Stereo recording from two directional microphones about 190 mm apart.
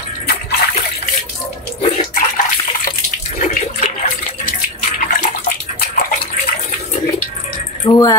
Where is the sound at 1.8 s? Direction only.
45° left (ahead or behind).